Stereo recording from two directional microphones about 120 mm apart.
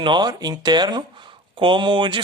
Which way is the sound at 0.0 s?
40° right (ahead or behind).